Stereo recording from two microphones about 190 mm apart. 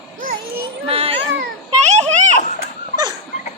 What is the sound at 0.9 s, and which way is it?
Speech, 30° right (ahead or behind).